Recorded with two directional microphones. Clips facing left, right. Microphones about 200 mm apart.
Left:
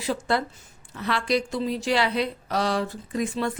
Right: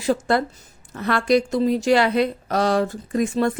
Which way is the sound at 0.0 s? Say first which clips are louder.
Right 5 dB; 45° right (ahead or behind).